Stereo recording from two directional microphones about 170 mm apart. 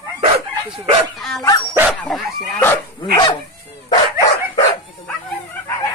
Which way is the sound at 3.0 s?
25° left (ahead or behind).